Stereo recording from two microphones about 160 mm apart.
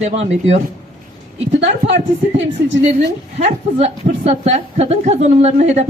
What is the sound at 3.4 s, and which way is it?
A woman's voice, 45° right (ahead or behind).